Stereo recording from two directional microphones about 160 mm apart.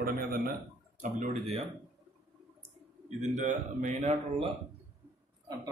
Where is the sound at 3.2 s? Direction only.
50° right (ahead or behind).